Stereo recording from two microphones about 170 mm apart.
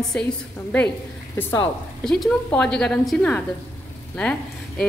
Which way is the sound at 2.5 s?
5° left (ahead or behind).